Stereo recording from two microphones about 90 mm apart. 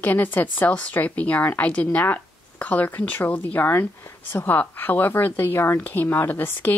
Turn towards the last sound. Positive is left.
turn(degrees=20)  # may be behind; listen again after turning